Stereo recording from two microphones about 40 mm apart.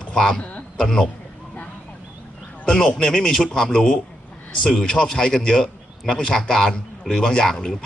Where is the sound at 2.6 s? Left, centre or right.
Centre.